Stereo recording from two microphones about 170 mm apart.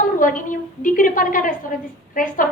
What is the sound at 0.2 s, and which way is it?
A woman's voice, 50° left (ahead or behind).